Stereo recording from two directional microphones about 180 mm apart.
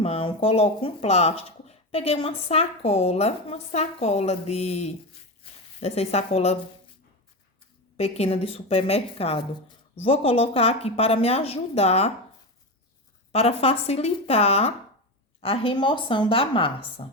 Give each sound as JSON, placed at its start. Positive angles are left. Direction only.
{"t": 0.0, "sound": "speech", "side_deg": 30}
{"t": 7.9, "sound": "speech", "side_deg": 35}
{"t": 13.3, "sound": "a woman's voice", "side_deg": 35}